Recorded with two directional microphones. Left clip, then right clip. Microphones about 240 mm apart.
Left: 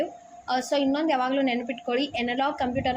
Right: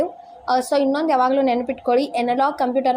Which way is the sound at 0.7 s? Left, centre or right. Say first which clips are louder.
Right 4 dB; right.